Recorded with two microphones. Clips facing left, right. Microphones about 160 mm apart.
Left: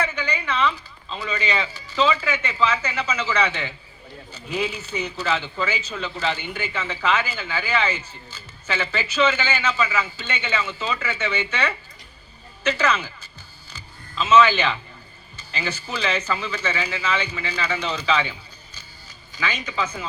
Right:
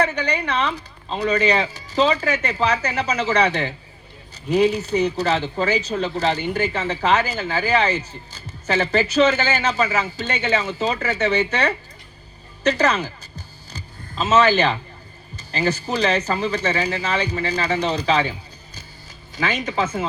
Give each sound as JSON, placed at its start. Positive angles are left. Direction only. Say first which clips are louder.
{"t": 0.0, "sound": "speech", "louder": "right 5 dB", "side_deg": -40}
{"t": 13.7, "sound": "a sound", "louder": "right 1 dB", "side_deg": -40}
{"t": 15.4, "sound": "speech", "louder": "right 8 dB", "side_deg": -40}
{"t": 19.4, "sound": "speech", "louder": "right 5 dB", "side_deg": -45}